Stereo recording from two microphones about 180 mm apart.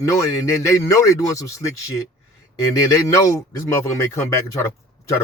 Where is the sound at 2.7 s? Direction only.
20° left (ahead or behind).